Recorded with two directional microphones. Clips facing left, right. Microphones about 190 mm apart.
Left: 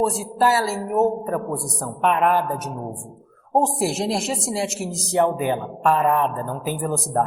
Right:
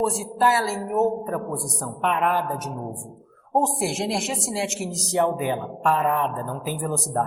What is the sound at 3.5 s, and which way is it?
Speech, 35° left (ahead or behind).